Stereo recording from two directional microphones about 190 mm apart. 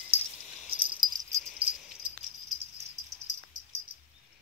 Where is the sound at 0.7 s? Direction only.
25° right (ahead or behind).